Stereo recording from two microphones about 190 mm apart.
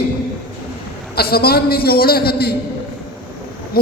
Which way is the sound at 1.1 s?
55° left (ahead or behind).